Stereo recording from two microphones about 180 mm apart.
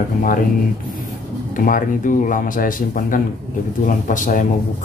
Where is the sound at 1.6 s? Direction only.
50° left (ahead or behind).